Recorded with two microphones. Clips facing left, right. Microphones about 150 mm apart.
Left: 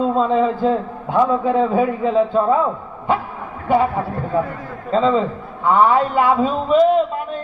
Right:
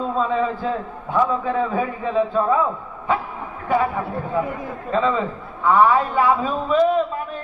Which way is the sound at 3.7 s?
30° left (ahead or behind).